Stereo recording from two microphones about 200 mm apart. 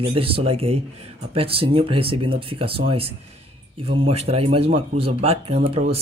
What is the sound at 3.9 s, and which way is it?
Speech, 30° right (ahead or behind).